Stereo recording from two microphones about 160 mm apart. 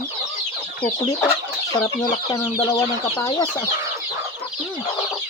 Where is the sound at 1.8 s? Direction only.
20° left (ahead or behind).